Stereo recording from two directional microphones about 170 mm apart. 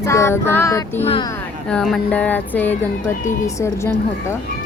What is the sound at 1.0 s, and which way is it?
Speech, 35° left (ahead or behind).